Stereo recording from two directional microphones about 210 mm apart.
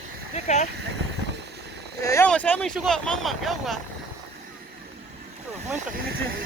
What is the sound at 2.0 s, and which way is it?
Speech, 15° left (ahead or behind).